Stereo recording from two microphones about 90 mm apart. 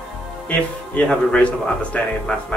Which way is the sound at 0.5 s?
15° left (ahead or behind).